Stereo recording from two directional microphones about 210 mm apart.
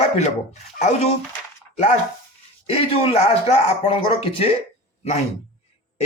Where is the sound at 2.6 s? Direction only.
30° left (ahead or behind).